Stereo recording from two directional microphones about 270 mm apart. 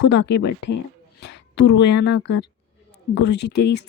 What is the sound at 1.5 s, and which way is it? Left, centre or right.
Speech, left.